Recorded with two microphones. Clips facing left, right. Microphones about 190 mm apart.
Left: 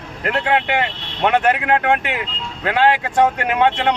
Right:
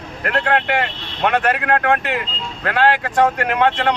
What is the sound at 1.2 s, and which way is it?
Speech, 20° left (ahead or behind).